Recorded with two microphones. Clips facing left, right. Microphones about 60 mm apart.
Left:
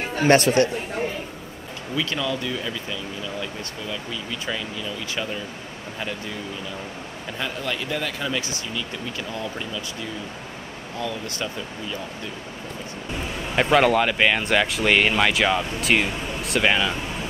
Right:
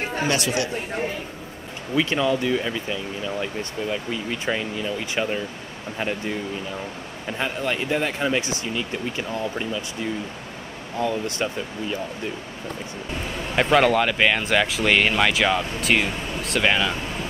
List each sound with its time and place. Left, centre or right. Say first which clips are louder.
0.3 s speech: left 9 dB; left
2.0 s speech: right 5 dB; right
7.3 s speech: right 3 dB; right
11.0 s speech: right 5 dB; right
13.6 s speech: even; centre